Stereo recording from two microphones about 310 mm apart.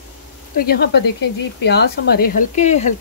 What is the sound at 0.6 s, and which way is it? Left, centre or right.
Speech, left.